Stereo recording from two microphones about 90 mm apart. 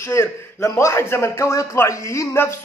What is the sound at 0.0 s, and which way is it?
A man's voice, 30° left (ahead or behind).